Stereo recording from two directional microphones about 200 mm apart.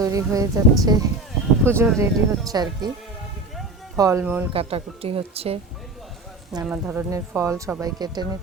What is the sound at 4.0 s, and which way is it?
Speech, 15° right (ahead or behind).